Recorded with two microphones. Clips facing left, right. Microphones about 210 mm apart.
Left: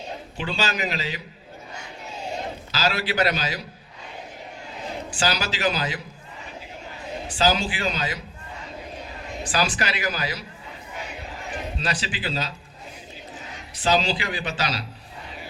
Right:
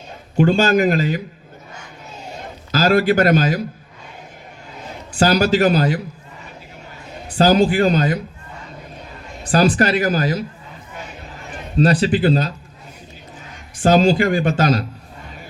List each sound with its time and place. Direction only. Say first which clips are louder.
0.3 s a man's voice: right 14 dB; 50° right (ahead or behind)
2.7 s a man's voice: right 10 dB; 50° right (ahead or behind)
5.2 s a man's voice: right 11 dB; 45° right (ahead or behind)
7.3 s a man's voice: right 10 dB; 55° right (ahead or behind)
9.5 s a man's voice: right 11 dB; 50° right (ahead or behind)
11.8 s a man's voice: right 18 dB; 55° right (ahead or behind)